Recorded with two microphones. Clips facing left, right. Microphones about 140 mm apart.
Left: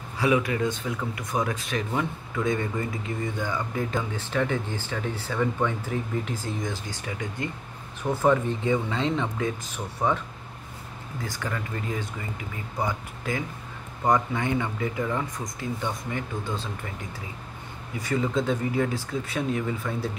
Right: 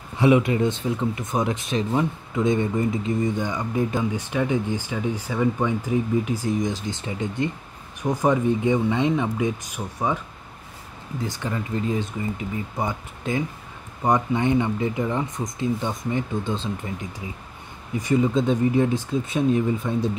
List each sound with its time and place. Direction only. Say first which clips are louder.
0.2 s speech: right 5 dB; 25° right (ahead or behind)
11.2 s speech: right 4 dB; 20° right (ahead or behind)
17.9 s speech: right 5 dB; 20° right (ahead or behind)